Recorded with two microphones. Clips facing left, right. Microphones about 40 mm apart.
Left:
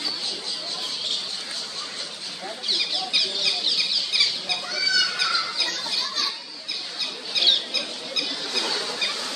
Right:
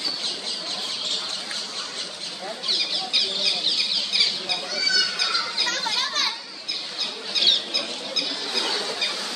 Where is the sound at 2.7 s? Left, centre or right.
Centre.